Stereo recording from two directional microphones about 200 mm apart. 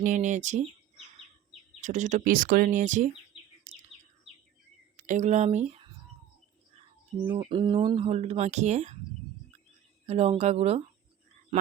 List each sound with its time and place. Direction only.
0.0 s speech: 40° right (ahead or behind)
3.7 s bird: 35° right (ahead or behind)
4.9 s speech: 40° right (ahead or behind)
7.3 s speech: 25° right (ahead or behind)
10.1 s speech: 30° right (ahead or behind)